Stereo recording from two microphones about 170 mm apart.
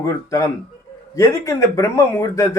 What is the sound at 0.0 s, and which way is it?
A man's voice, 20° left (ahead or behind).